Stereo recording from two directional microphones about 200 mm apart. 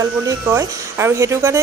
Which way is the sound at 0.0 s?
15° right (ahead or behind).